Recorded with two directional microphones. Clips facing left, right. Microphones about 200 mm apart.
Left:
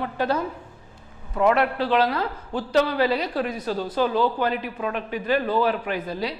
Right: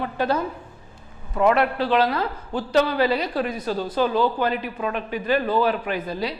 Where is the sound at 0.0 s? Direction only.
15° right (ahead or behind).